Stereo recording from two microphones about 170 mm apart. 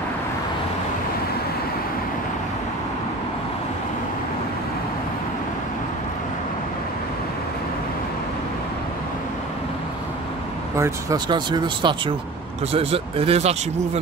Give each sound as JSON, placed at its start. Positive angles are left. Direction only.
{"t": 10.8, "sound": "speech", "side_deg": -20}